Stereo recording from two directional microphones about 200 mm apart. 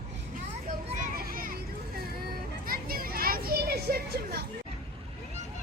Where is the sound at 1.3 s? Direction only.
45° right (ahead or behind).